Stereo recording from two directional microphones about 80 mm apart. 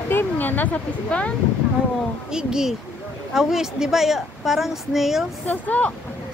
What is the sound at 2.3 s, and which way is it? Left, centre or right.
A woman's voice, centre.